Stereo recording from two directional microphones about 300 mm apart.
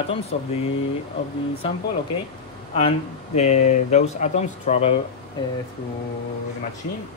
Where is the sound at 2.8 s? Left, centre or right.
Left.